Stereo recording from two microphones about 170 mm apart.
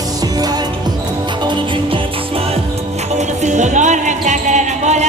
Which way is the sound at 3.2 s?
45° right (ahead or behind).